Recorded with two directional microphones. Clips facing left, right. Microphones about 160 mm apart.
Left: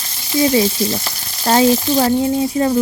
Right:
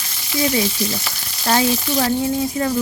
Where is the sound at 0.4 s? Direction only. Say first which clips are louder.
Left 5 dB; 30° left (ahead or behind).